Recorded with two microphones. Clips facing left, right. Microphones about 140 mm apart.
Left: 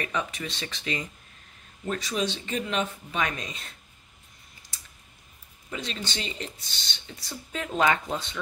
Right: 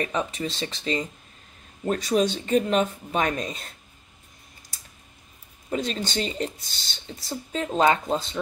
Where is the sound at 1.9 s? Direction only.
45° right (ahead or behind).